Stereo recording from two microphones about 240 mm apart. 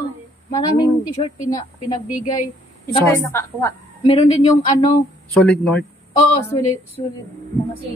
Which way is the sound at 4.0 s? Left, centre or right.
Left.